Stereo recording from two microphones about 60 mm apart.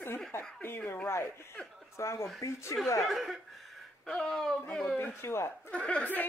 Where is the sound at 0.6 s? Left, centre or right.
Left.